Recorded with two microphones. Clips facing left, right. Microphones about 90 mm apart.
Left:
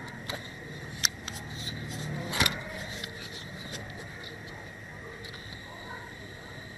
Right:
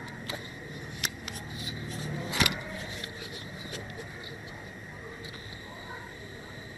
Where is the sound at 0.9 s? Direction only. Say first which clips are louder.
Left 2 dB; 20° left (ahead or behind).